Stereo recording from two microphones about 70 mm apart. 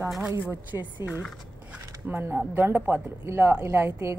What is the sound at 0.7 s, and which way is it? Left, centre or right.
Speech, right.